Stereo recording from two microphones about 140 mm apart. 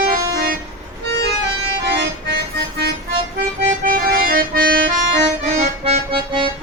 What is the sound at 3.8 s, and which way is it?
Accordion, 90° right.